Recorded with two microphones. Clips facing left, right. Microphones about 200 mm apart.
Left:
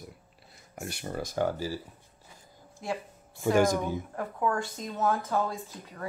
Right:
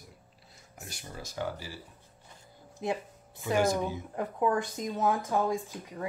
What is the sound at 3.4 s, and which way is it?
Speech, 50° left (ahead or behind).